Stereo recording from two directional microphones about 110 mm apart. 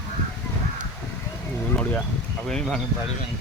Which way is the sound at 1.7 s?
10° left (ahead or behind).